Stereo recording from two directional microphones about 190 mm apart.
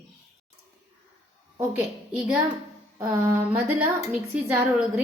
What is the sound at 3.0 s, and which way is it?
Speech, 15° right (ahead or behind).